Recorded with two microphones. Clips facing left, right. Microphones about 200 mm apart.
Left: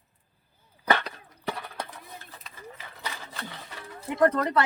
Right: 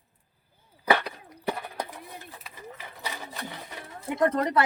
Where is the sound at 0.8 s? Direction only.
10° right (ahead or behind).